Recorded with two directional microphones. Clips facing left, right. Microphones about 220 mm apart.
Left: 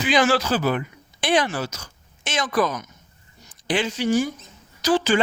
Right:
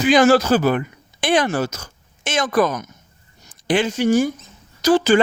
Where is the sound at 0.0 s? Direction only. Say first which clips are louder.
Right 6 dB; 45° right (ahead or behind).